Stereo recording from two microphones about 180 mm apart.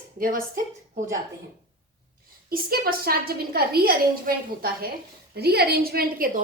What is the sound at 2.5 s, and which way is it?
A woman's voice, 55° right (ahead or behind).